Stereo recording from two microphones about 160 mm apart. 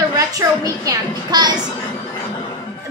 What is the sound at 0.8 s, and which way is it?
Speech, 25° right (ahead or behind).